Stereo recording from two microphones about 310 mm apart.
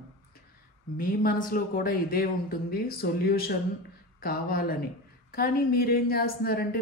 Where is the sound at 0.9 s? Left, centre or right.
Left.